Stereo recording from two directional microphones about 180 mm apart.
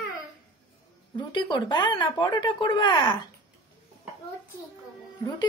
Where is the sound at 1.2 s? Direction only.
25° left (ahead or behind).